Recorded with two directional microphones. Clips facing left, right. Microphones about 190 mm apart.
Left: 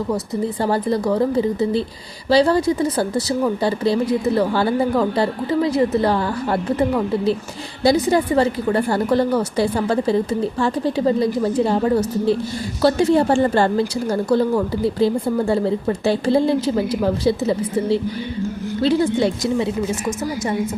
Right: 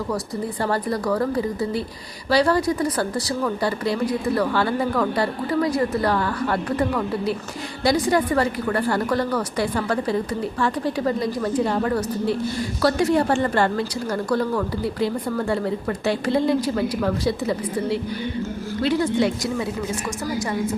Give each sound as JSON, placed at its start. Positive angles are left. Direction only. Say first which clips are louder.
{"t": 0.6, "sound": "speech", "louder": "left 3 dB", "side_deg": 25}
{"t": 18.8, "sound": "speech", "louder": "left 3 dB", "side_deg": 30}